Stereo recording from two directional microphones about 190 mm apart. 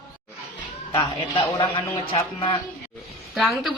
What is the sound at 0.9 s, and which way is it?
A man's voice, 25° left (ahead or behind).